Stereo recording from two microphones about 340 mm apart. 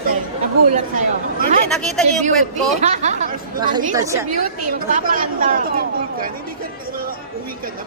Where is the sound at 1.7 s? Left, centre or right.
Centre.